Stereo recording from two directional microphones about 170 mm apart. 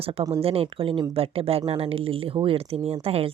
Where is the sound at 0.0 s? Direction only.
35° right (ahead or behind).